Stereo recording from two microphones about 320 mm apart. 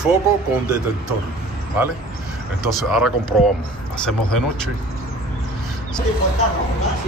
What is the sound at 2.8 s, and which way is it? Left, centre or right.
Speech, centre.